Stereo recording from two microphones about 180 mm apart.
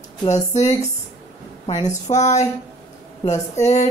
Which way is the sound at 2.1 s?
40° left (ahead or behind).